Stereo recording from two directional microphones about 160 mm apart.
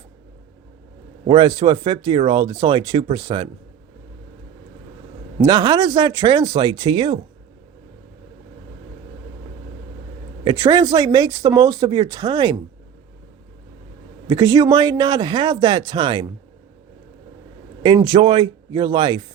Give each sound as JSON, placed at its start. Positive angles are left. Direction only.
{"t": 1.3, "sound": "speech", "side_deg": -30}
{"t": 5.4, "sound": "speech", "side_deg": -25}
{"t": 10.4, "sound": "speech", "side_deg": -25}
{"t": 14.3, "sound": "speech", "side_deg": -20}
{"t": 17.8, "sound": "speech", "side_deg": -30}